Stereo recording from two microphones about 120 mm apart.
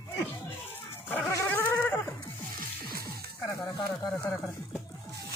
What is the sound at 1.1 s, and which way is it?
Dog, 15° left (ahead or behind).